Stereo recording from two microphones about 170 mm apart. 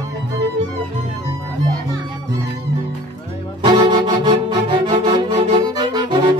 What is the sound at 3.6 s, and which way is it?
Music, 25° right (ahead or behind).